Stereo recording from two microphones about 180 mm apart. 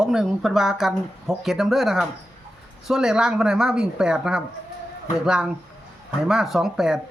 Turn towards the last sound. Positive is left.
turn(degrees=0)  # may be behind; listen again after turning